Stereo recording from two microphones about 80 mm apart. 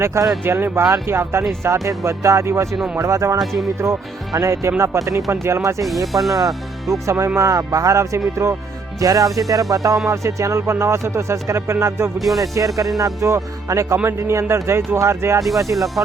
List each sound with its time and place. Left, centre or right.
0.0 s speech: right
4.3 s music: right
4.8 s speech: right
6.5 s speech: centre
7.3 s music: right
8.4 s speech: right
9.0 s music: right
10.1 s speech: right
12.4 s music: right
13.0 s speech: right
15.7 s speech: centre